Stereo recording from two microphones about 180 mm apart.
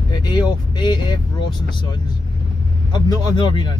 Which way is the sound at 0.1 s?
25° left (ahead or behind).